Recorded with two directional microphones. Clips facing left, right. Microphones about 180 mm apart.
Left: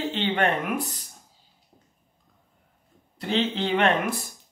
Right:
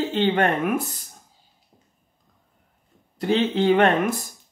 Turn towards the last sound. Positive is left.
turn(degrees=-45)  # may be behind; listen again after turning